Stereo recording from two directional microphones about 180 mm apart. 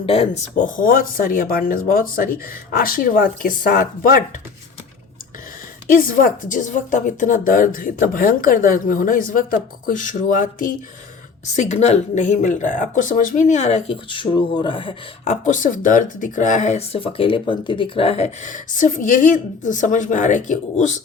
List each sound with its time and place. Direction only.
0.0 s speech: 30° left (ahead or behind)
0.5 s a woman's voice: 50° left (ahead or behind)
5.9 s a woman's voice: 50° left (ahead or behind)